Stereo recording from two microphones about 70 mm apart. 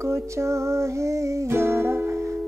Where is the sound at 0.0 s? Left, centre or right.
Right.